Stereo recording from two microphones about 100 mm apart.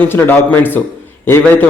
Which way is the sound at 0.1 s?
20° left (ahead or behind).